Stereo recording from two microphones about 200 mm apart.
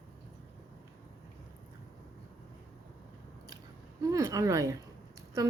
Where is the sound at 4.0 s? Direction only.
15° right (ahead or behind).